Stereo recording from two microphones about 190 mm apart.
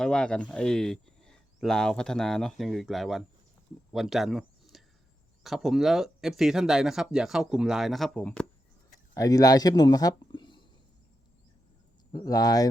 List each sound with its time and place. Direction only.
0.0 s speech: 5° left (ahead or behind)
9.1 s speech: 20° left (ahead or behind)
12.1 s speech: 20° left (ahead or behind)